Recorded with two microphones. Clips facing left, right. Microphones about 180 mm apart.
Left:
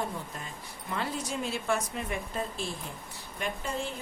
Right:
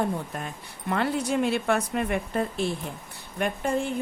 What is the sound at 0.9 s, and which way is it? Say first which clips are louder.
Speech: right 8 dB; 60° right (ahead or behind).